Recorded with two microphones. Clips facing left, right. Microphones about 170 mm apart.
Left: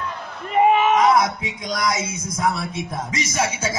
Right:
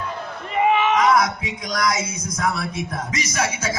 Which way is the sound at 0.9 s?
25° left (ahead or behind).